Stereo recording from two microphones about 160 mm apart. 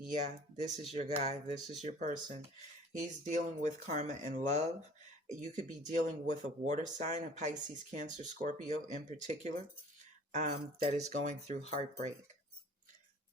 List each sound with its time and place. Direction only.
0.1 s speech: 45° right (ahead or behind)